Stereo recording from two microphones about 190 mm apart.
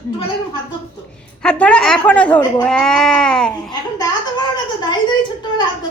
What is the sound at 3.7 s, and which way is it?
A woman's voice, 20° left (ahead or behind).